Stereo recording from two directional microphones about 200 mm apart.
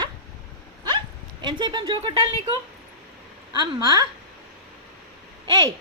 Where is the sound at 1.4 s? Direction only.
25° right (ahead or behind).